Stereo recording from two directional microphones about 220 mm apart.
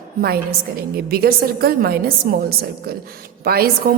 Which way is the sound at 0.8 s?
45° right (ahead or behind).